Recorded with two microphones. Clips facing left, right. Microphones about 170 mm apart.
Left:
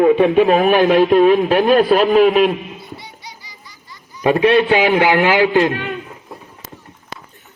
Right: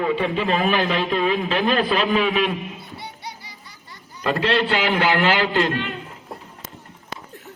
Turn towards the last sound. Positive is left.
turn(degrees=55)  # may be behind; listen again after turning